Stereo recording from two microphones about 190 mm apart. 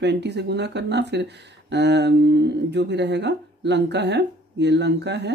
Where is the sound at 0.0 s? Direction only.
65° right (ahead or behind).